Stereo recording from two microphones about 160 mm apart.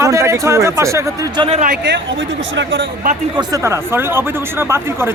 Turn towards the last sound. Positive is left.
turn(degrees=-15)  # may be behind; listen again after turning